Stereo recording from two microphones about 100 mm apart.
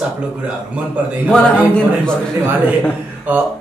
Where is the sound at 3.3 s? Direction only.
15° right (ahead or behind).